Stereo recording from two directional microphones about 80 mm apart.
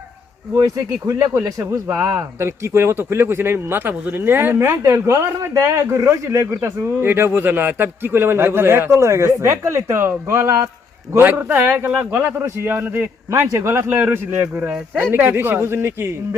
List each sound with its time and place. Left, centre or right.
0.6 s speech: right
1.3 s a man's voice: right